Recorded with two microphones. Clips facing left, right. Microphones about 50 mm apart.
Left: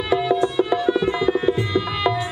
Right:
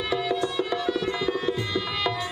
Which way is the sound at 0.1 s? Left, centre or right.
Centre.